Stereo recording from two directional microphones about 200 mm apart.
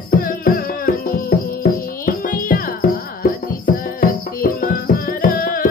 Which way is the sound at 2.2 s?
45° left (ahead or behind).